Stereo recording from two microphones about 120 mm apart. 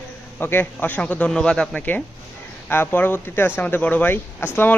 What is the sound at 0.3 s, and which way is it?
Speech, 15° left (ahead or behind).